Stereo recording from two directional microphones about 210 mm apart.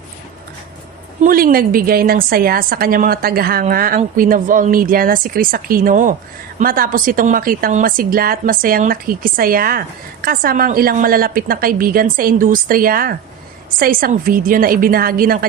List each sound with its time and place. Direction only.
1.2 s a woman's voice: 40° right (ahead or behind)